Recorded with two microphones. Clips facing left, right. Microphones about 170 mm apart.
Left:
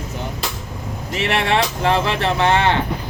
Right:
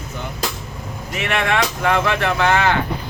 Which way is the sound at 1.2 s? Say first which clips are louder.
Left 1 dB; 30° left (ahead or behind).